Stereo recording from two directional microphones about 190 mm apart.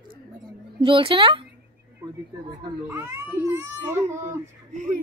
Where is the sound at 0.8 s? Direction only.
25° right (ahead or behind).